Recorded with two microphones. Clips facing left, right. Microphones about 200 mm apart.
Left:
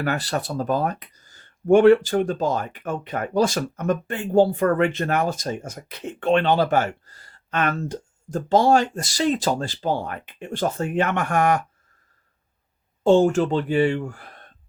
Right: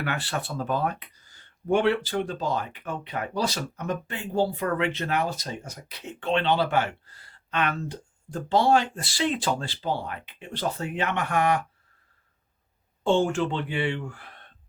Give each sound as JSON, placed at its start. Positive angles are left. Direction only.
{"t": 0.0, "sound": "speech", "side_deg": 40}
{"t": 13.1, "sound": "speech", "side_deg": 40}